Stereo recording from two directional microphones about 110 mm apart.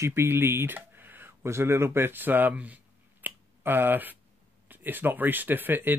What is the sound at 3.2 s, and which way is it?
Finger snapping, 20° right (ahead or behind).